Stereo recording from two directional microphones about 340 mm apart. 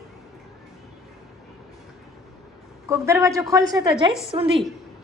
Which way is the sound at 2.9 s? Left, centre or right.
Centre.